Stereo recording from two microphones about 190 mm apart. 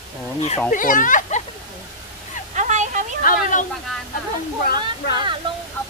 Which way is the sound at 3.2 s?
45° left (ahead or behind).